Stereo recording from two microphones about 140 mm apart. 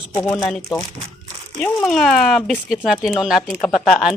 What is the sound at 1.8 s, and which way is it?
Speech, 5° left (ahead or behind).